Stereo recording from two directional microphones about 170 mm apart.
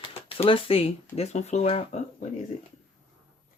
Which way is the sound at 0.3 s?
30° left (ahead or behind).